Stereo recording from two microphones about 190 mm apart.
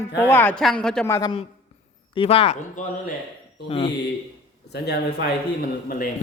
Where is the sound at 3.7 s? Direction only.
25° left (ahead or behind).